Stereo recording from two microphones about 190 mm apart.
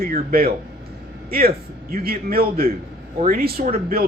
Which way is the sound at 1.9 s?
50° right (ahead or behind).